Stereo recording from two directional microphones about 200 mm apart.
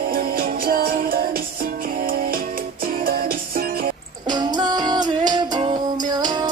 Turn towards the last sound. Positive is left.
turn(degrees=-20)  # may be behind; listen again after turning